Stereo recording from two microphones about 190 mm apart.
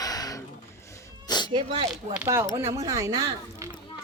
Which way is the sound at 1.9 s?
5° right (ahead or behind).